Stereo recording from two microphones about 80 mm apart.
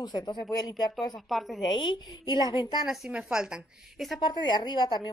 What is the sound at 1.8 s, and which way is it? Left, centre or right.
A woman's voice, left.